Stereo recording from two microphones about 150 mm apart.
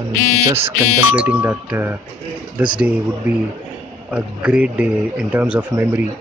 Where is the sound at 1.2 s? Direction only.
10° right (ahead or behind).